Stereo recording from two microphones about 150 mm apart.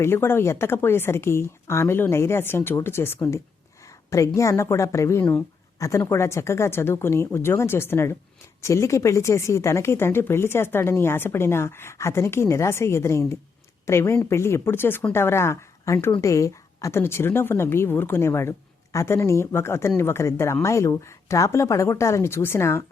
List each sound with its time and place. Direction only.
0.0 s a woman's voice: 15° left (ahead or behind)